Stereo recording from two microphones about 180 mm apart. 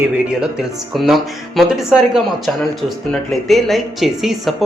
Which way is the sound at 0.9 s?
Centre (ahead or behind).